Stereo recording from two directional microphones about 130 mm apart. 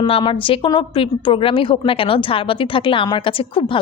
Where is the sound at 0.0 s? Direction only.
40° left (ahead or behind).